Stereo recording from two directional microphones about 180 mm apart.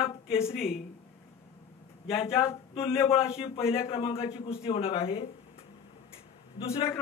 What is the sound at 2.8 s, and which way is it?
A man's voice, 30° left (ahead or behind).